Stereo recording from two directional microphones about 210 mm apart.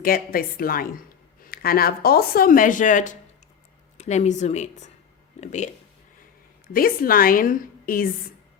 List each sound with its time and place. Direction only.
0.0 s speech: 45° left (ahead or behind)
6.7 s speech: 45° left (ahead or behind)